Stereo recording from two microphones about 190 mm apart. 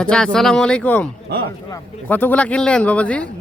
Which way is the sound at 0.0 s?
5° left (ahead or behind).